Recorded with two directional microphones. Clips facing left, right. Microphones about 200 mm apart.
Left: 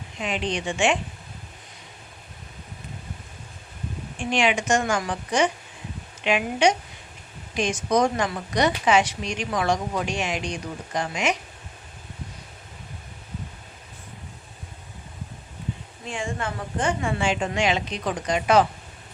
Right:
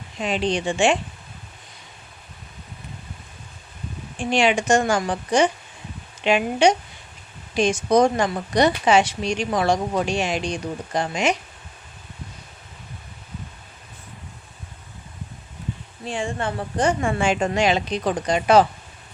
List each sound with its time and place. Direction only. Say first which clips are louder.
0.2 s speech: right 4 dB; 35° right (ahead or behind)
4.2 s speech: right 3 dB; 35° right (ahead or behind)
16.0 s speech: right 4 dB; 35° right (ahead or behind)